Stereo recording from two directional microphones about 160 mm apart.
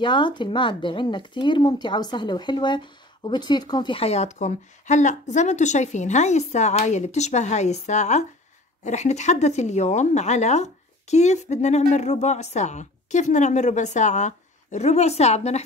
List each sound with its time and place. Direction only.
0.0 s speech: 30° left (ahead or behind)